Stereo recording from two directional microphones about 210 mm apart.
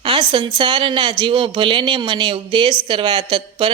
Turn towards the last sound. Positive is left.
turn(degrees=-25)  # may be behind; listen again after turning